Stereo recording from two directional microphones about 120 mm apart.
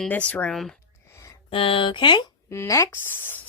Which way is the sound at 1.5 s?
45° left (ahead or behind).